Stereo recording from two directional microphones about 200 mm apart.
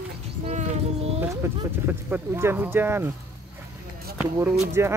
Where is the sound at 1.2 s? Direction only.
10° right (ahead or behind).